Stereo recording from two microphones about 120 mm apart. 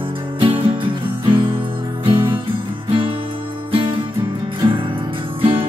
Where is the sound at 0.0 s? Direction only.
45° right (ahead or behind).